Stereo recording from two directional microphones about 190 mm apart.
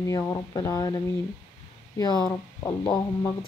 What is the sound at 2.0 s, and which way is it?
Speech, 20° left (ahead or behind).